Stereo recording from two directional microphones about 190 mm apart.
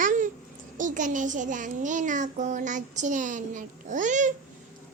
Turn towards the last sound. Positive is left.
turn(degrees=-40)  # may be behind; listen again after turning